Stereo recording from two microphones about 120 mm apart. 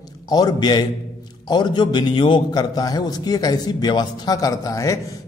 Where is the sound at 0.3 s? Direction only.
35° left (ahead or behind).